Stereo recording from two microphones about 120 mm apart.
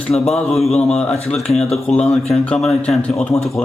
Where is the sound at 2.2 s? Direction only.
60° left (ahead or behind).